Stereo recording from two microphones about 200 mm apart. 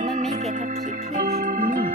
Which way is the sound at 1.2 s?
40° right (ahead or behind).